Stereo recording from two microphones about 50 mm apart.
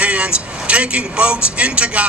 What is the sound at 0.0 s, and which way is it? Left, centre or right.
Speech, right.